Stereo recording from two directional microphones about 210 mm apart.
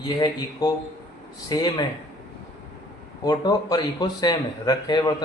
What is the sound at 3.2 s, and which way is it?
Speech, 20° left (ahead or behind).